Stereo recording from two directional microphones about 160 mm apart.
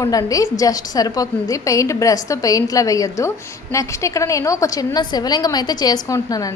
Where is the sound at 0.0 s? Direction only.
20° left (ahead or behind).